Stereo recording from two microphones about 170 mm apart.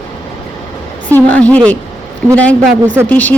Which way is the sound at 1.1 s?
10° left (ahead or behind).